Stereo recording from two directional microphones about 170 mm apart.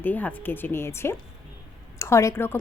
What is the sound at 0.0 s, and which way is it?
A woman's voice, 10° left (ahead or behind).